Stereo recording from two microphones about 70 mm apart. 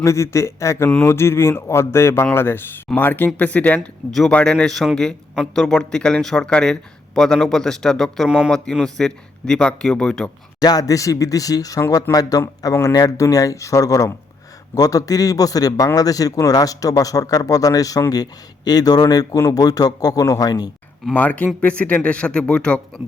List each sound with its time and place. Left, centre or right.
0.0 s speech: left; by 4.5 s centre
4.5 s a man's voice: centre
10.6 s speech: left
12.1 s speech: left
12.8 s speech: left
18.1 s speech: left
21.2 s speech: left